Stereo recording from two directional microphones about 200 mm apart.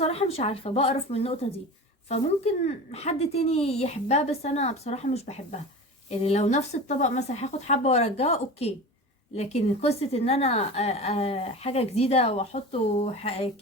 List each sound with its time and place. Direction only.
0.0 s a woman's voice: 30° left (ahead or behind)